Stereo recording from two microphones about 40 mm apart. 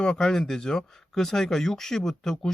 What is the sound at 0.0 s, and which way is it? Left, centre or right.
Speech, centre.